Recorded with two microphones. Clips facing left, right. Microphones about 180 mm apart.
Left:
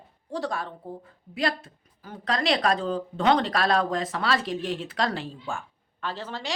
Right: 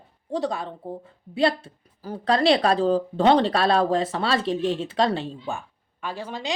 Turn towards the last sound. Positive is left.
turn(degrees=-15)  # may be behind; listen again after turning